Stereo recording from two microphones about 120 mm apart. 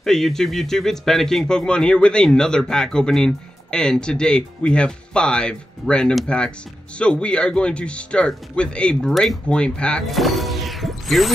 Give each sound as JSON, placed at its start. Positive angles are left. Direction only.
{"t": 0.0, "sound": "speech", "side_deg": 5}